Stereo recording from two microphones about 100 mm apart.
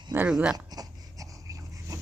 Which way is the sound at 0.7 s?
35° right (ahead or behind).